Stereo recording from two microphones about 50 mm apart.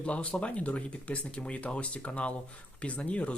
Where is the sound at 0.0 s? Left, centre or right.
Left.